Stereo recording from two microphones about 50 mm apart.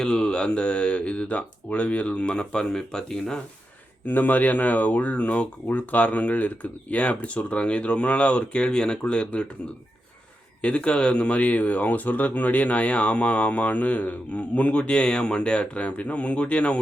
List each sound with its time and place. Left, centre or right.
0.0 s speech: centre
4.0 s speech: left
10.6 s speech: left